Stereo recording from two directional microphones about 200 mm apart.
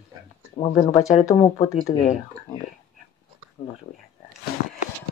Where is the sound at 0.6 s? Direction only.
30° left (ahead or behind).